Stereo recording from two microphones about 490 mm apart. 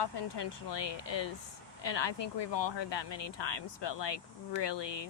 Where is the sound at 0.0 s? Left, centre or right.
Left.